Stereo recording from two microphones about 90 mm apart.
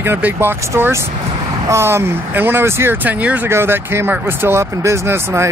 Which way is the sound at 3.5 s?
25° right (ahead or behind).